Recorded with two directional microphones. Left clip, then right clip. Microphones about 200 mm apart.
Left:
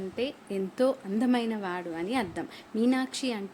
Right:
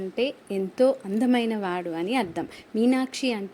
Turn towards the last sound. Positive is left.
turn(degrees=-15)  # may be behind; listen again after turning